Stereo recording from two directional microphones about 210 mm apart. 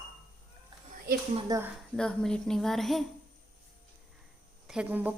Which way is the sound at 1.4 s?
15° right (ahead or behind).